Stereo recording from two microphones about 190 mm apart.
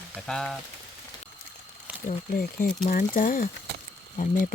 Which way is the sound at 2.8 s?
45° left (ahead or behind).